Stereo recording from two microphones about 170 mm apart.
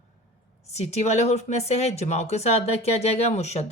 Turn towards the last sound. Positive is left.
turn(degrees=40)  # may be behind; listen again after turning